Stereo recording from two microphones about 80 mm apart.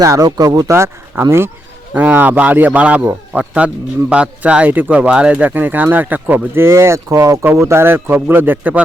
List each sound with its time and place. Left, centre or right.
0.0 s speech: right
0.8 s speech: right
1.9 s speech: centre
6.7 s speech: right